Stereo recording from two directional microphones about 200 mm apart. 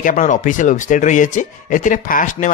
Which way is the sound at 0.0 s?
40° left (ahead or behind).